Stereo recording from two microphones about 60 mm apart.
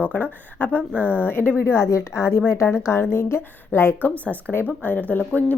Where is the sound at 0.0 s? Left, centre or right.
Left.